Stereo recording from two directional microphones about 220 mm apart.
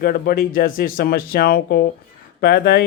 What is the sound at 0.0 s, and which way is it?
Speech, 40° left (ahead or behind).